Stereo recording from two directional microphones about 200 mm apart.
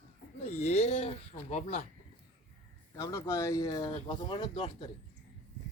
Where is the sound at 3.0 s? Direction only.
15° left (ahead or behind).